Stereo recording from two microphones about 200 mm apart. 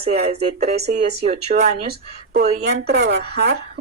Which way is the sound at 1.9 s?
50° right (ahead or behind).